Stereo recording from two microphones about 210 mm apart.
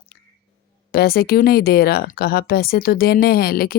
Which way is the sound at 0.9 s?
45° left (ahead or behind).